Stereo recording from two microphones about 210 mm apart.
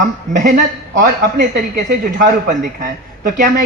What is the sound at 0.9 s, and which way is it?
A man's voice, 35° right (ahead or behind).